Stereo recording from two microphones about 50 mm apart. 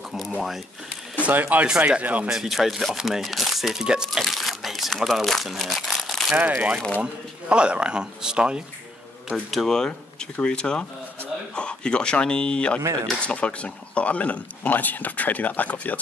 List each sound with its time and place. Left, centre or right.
1.3 s speech: right
2.2 s speech: centre
4.2 s speech: centre
6.3 s speech: right
9.5 s speech: centre; by 16.0 s left